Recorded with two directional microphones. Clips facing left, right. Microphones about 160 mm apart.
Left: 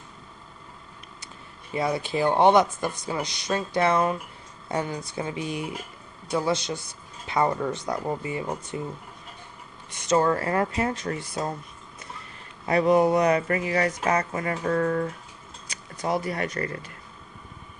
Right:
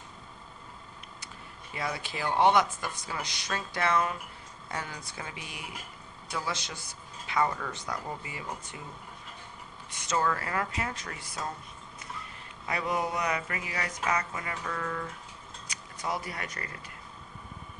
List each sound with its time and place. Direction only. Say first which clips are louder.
1.7 s speech: left 9 dB; 25° left (ahead or behind)
10.1 s speech: left 8 dB; 30° left (ahead or behind)
12.6 s speech: left 12 dB; 30° left (ahead or behind)
15.7 s a sound: left 7 dB; 30° left (ahead or behind)